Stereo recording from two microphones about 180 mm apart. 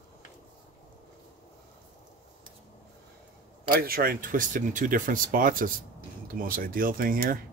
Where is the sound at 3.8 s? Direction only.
55° right (ahead or behind).